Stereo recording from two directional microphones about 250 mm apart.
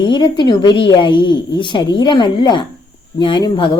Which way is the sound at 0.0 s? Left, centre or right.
Centre.